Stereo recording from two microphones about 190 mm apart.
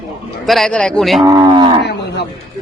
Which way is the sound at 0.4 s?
Centre (ahead or behind).